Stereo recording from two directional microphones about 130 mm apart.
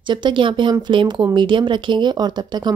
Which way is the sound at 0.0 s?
35° right (ahead or behind).